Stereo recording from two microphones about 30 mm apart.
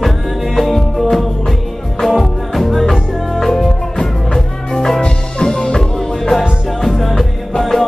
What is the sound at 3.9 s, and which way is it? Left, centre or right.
Music, centre.